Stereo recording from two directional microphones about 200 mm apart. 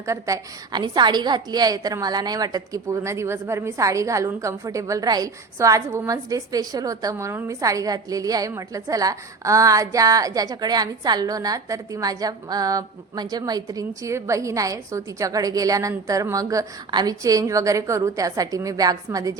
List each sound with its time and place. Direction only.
0.0 s a woman's voice: 15° right (ahead or behind)